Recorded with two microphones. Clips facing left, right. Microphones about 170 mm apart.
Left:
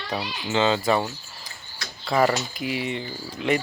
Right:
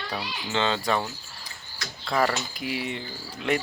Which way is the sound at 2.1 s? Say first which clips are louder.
Left 4 dB; centre (ahead or behind).